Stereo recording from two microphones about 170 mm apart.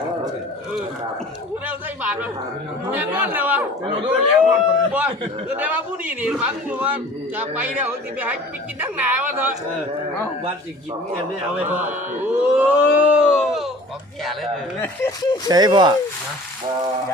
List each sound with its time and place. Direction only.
1.6 s a sound: 10° right (ahead or behind)
3.2 s a man's voice: 10° right (ahead or behind)
11.5 s a man's voice: 10° right (ahead or behind)
15.4 s speech: 25° right (ahead or behind)